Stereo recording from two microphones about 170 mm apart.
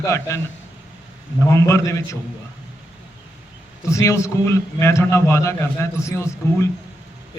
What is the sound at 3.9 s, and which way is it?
A man's voice, 15° left (ahead or behind).